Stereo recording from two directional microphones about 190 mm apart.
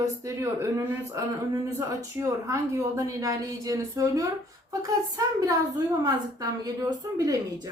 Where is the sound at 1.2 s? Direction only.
15° right (ahead or behind).